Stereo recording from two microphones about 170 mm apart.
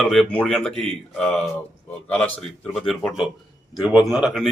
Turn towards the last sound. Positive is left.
turn(degrees=0)  # may be behind; listen again after turning